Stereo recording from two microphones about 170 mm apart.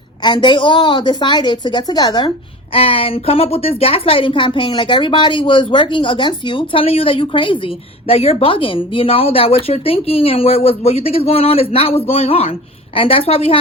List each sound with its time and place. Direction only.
0.2 s a woman's voice: 25° left (ahead or behind)